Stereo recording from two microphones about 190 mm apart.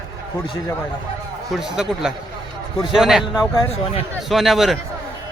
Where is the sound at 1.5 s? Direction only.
Centre (ahead or behind).